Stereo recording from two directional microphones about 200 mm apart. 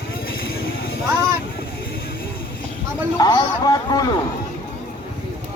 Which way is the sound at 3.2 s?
20° left (ahead or behind).